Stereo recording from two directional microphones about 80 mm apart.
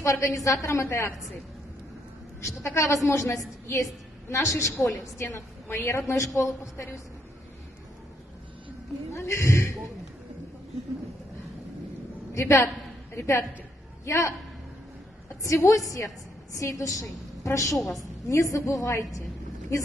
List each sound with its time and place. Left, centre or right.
0.0 s a woman's voice: left
2.4 s a woman's voice: left
9.1 s a woman's voice: left
12.4 s a woman's voice: left
15.4 s a woman's voice: left
17.7 s a woman's voice: centre
18.3 s a woman's voice: left